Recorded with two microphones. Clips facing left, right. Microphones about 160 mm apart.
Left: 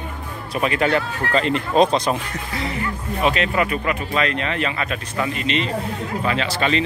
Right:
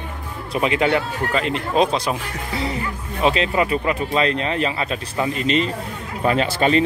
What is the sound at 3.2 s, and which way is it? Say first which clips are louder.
Speech: right 2 dB; 30° right (ahead or behind).